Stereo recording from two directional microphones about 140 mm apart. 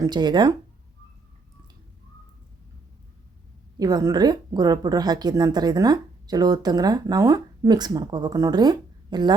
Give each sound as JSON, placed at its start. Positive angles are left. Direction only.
{"t": 0.0, "sound": "speech", "side_deg": -30}
{"t": 3.8, "sound": "a woman's voice", "side_deg": -25}